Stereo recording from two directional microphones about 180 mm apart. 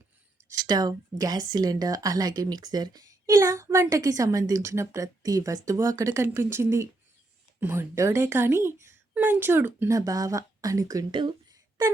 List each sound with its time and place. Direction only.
0.6 s speech: 20° right (ahead or behind)